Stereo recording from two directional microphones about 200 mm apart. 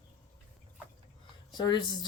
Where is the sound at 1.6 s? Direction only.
20° left (ahead or behind).